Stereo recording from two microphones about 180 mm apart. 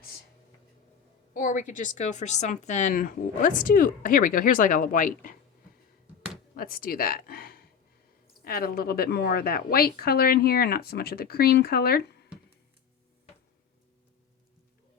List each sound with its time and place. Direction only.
1.3 s a woman's voice: 50° left (ahead or behind)
6.6 s a woman's voice: 50° left (ahead or behind)